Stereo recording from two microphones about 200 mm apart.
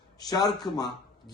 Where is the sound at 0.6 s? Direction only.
20° left (ahead or behind).